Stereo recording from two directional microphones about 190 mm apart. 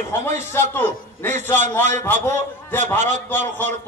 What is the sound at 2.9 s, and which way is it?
Speech, 40° right (ahead or behind).